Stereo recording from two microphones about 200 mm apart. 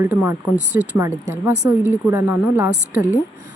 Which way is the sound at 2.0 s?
10° right (ahead or behind).